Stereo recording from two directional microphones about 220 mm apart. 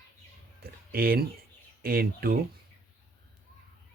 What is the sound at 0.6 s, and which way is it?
Speech, 45° right (ahead or behind).